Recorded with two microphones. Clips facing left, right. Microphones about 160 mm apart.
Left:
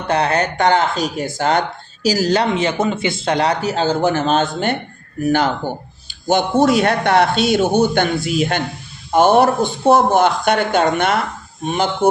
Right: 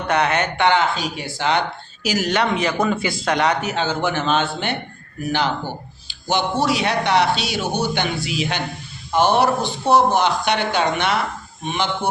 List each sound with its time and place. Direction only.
0.1 s speech: 35° left (ahead or behind)
2.0 s a man's voice: 30° left (ahead or behind)